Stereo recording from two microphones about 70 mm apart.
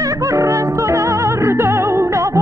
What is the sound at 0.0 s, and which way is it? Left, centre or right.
Music, right.